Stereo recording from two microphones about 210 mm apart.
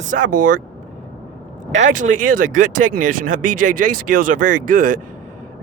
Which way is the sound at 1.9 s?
40° right (ahead or behind).